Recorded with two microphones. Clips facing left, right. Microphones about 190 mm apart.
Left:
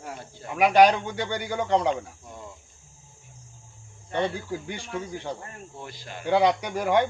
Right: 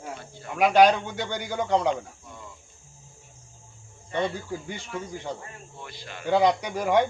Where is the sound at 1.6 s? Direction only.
10° right (ahead or behind).